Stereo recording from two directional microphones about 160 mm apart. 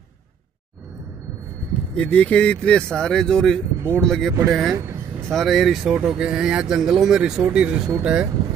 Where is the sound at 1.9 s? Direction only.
5° left (ahead or behind).